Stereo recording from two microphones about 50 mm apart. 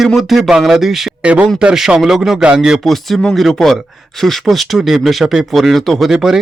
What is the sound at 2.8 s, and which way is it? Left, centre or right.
Speech, centre.